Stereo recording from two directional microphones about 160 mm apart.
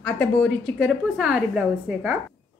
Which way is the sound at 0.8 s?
5° right (ahead or behind).